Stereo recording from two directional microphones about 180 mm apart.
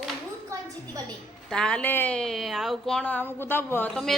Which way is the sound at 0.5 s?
15° right (ahead or behind).